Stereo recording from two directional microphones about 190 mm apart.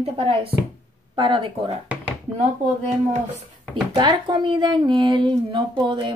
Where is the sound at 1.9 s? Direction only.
5° right (ahead or behind).